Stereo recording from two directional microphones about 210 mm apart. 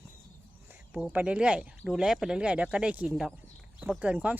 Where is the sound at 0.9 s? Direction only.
5° right (ahead or behind).